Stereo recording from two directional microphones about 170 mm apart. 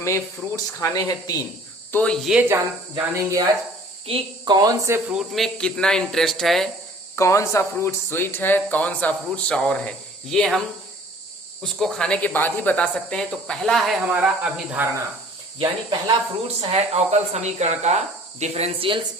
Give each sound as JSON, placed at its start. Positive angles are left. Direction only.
{"t": 0.0, "sound": "speech", "side_deg": 15}
{"t": 1.9, "sound": "speech", "side_deg": 5}
{"t": 2.5, "sound": "speech", "side_deg": -20}
{"t": 4.0, "sound": "speech", "side_deg": -30}
{"t": 5.0, "sound": "speech", "side_deg": 0}
{"t": 7.2, "sound": "speech", "side_deg": 15}
{"t": 11.6, "sound": "speech", "side_deg": 5}
{"t": 15.5, "sound": "speech", "side_deg": -30}
{"t": 16.6, "sound": "speech", "side_deg": -40}